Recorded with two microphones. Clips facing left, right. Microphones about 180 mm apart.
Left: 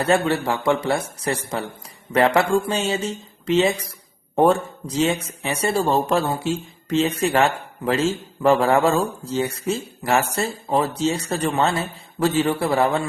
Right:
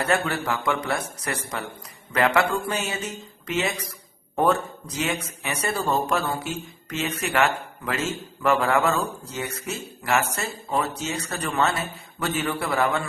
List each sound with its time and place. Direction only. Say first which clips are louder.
0.0 s a man's voice: left 5 dB; 30° left (ahead or behind)